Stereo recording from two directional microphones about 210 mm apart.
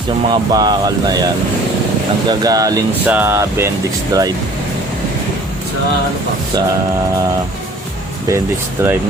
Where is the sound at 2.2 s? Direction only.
15° right (ahead or behind).